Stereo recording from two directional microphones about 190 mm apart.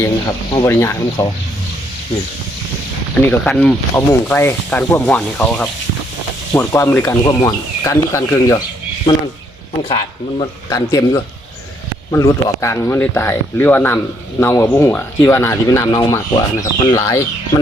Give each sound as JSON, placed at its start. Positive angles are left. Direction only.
{"t": 0.5, "sound": "speech", "side_deg": 15}
{"t": 3.2, "sound": "speech", "side_deg": 5}
{"t": 6.5, "sound": "speech", "side_deg": 15}
{"t": 9.9, "sound": "speech", "side_deg": 25}